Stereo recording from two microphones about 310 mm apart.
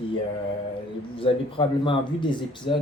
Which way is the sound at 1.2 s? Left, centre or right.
Centre.